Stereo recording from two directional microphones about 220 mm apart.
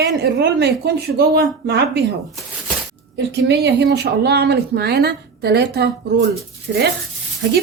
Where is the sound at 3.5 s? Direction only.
50° right (ahead or behind).